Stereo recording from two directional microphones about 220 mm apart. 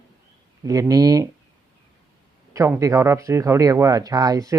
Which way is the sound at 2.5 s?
15° right (ahead or behind).